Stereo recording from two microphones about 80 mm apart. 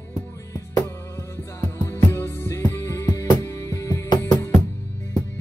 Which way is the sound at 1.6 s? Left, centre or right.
Left.